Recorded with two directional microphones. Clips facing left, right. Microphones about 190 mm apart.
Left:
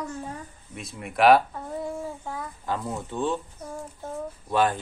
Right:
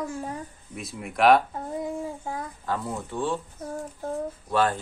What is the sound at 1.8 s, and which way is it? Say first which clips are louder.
Child singing: right 1 dB; 15° right (ahead or behind).